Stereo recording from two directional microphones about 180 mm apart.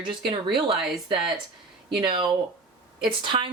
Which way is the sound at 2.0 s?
25° right (ahead or behind).